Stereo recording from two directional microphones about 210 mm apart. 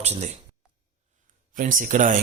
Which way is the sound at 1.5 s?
40° right (ahead or behind).